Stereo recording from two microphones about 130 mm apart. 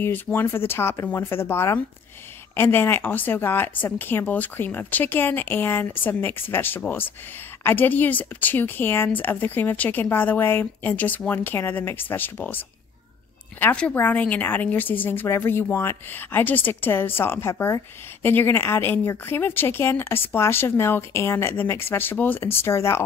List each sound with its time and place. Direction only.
0.0 s a woman's voice: 15° left (ahead or behind)